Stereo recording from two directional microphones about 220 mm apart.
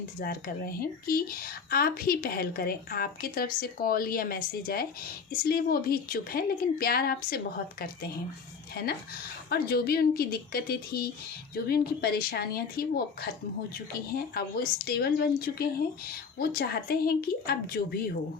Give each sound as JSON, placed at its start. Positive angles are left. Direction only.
{"t": 0.2, "sound": "a woman's voice", "side_deg": 40}